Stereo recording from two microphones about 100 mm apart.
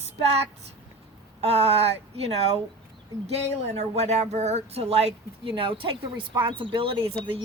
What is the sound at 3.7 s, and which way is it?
Speech, 90° right.